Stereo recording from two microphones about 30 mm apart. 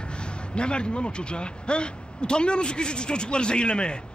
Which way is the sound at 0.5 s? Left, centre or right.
Left.